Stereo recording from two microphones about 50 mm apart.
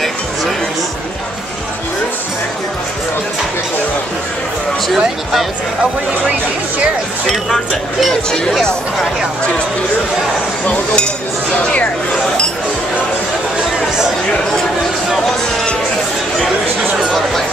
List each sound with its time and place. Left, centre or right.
4.8 s a sound: centre
7.2 s speech: centre
11.5 s speech: left